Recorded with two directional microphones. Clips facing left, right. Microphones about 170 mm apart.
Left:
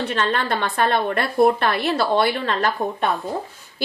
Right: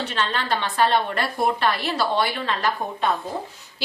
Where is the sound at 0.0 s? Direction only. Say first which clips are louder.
Left 4 dB; 55° left (ahead or behind).